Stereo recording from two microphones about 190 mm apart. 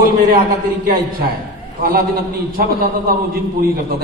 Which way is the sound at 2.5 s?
50° right (ahead or behind).